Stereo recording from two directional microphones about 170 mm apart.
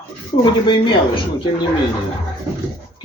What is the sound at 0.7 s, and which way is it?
Speech, 30° left (ahead or behind).